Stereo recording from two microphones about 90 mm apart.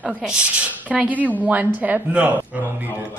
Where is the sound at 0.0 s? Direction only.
10° right (ahead or behind).